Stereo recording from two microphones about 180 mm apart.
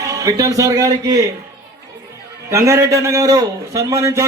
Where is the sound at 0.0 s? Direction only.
20° right (ahead or behind).